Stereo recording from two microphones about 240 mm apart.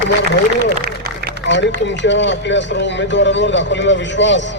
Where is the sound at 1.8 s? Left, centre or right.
Left.